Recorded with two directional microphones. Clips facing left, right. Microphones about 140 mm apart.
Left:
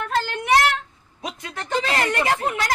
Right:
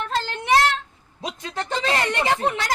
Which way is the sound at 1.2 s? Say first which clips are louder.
Right 3 dB; 30° right (ahead or behind).